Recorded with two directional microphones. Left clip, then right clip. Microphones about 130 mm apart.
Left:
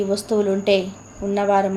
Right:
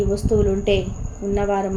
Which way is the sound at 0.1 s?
15° left (ahead or behind).